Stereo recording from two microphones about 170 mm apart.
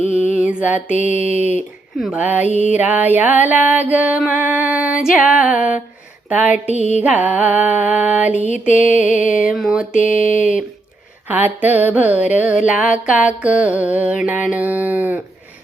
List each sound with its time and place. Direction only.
0.3 s mantra: 10° right (ahead or behind)
0.9 s mantra: 45° left (ahead or behind)
2.0 s music: 5° right (ahead or behind)
6.2 s a sound: 10° right (ahead or behind)
7.0 s music: 10° right (ahead or behind)
8.4 s mantra: 45° left (ahead or behind)
9.0 s music: 10° right (ahead or behind)
9.9 s mantra: 50° left (ahead or behind)
11.3 s music: 10° right (ahead or behind)